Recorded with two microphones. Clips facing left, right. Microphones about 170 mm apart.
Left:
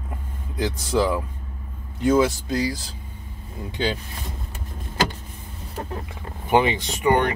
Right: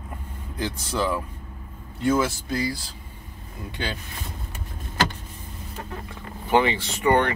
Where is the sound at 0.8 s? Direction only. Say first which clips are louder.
Left 4 dB; 15° left (ahead or behind).